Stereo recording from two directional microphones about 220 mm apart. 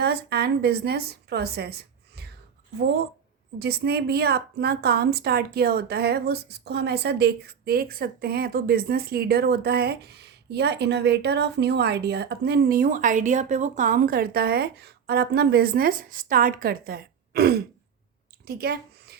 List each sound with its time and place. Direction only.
0.0 s a woman's voice: 45° right (ahead or behind)
3.6 s a woman's voice: 45° right (ahead or behind)